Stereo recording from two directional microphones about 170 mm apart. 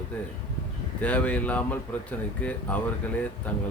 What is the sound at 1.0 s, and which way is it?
Speech, 5° left (ahead or behind).